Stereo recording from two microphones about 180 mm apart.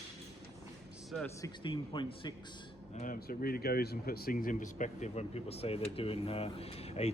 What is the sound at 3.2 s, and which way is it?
Speech, 55° left (ahead or behind).